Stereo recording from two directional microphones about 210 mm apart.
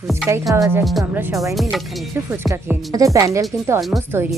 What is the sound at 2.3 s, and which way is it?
Speech, 15° right (ahead or behind).